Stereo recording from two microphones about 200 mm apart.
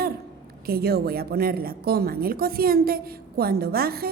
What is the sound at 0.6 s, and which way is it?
A woman's voice, 50° right (ahead or behind).